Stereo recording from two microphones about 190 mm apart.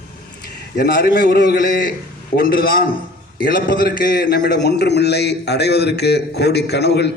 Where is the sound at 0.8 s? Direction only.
55° left (ahead or behind).